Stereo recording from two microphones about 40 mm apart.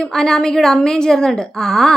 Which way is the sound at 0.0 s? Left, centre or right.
Centre.